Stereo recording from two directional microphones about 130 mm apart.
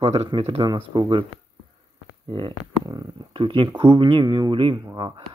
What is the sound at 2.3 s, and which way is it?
Speech, 35° right (ahead or behind).